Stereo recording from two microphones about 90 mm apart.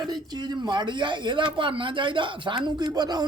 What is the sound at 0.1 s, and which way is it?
Speech, 55° right (ahead or behind).